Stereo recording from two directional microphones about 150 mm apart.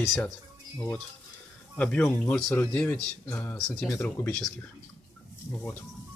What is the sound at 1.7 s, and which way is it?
Speech, 10° left (ahead or behind).